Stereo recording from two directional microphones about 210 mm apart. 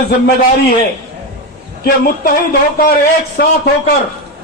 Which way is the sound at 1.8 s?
45° left (ahead or behind).